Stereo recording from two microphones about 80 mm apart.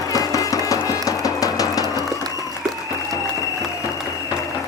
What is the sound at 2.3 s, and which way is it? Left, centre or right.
Applause, left.